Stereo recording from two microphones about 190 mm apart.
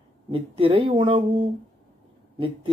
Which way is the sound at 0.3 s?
30° right (ahead or behind).